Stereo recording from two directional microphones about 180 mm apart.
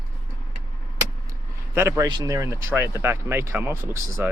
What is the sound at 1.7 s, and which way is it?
Speech, 15° right (ahead or behind).